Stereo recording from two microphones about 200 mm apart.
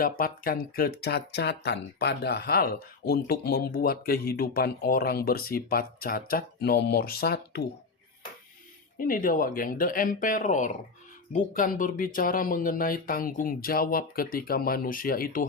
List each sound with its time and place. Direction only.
0.0 s speech: 45° left (ahead or behind)
9.0 s speech: 45° left (ahead or behind)